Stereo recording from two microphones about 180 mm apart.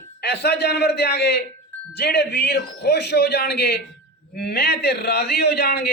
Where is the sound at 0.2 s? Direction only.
65° left (ahead or behind).